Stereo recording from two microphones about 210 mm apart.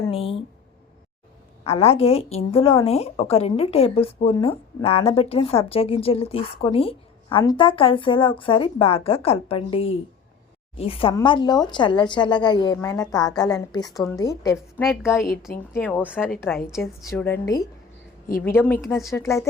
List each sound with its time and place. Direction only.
0.1 s a woman's voice: 25° left (ahead or behind)
1.6 s a woman's voice: 30° left (ahead or behind); by 17.4 s 10° left (ahead or behind)
18.3 s a woman's voice: 45° left (ahead or behind)
18.5 s a woman's voice: 5° left (ahead or behind)
19.1 s a woman's voice: 15° left (ahead or behind)